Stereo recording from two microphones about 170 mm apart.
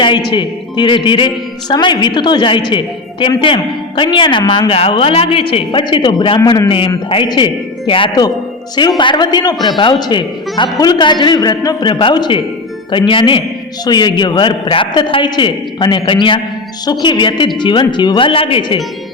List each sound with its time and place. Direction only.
0.3 s a woman's voice: 25° left (ahead or behind)